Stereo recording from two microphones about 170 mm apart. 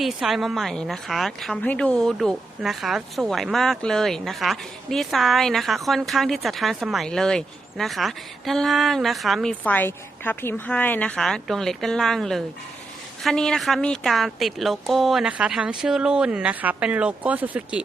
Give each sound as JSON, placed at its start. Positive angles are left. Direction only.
{"t": 0.0, "sound": "a woman's voice", "side_deg": 0}